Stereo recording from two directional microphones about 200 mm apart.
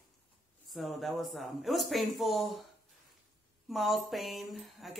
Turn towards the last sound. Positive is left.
turn(degrees=0)  # may be behind; listen again after turning